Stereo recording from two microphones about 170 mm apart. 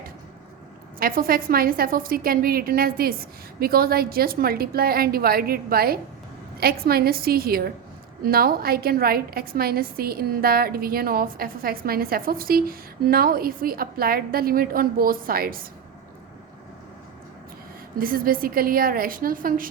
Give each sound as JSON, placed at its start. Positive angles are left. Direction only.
{"t": 0.9, "sound": "a woman's voice", "side_deg": -60}
{"t": 17.9, "sound": "a woman's voice", "side_deg": -60}